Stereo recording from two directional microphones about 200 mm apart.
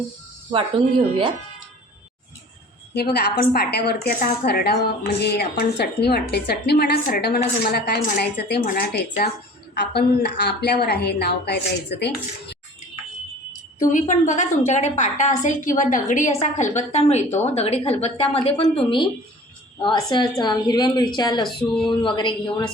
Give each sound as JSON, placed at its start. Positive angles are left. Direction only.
{"t": 2.9, "sound": "a woman's voice", "side_deg": 55}
{"t": 13.7, "sound": "a woman's voice", "side_deg": 40}